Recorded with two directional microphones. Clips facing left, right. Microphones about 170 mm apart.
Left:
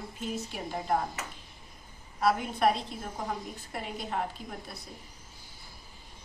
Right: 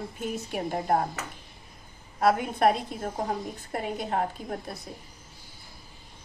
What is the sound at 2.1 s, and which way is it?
Speech, 50° right (ahead or behind).